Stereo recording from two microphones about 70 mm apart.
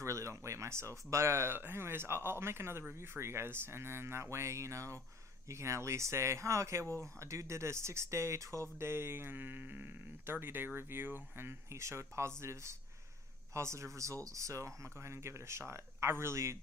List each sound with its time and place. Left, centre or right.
0.0 s speech: right